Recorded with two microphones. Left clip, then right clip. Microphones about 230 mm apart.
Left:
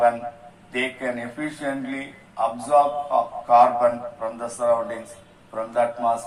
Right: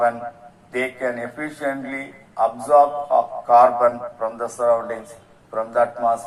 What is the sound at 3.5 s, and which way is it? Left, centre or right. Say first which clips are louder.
A man's voice: right 2 dB; right.